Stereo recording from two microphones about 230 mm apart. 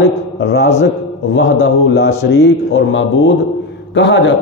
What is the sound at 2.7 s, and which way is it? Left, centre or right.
A man's voice, left.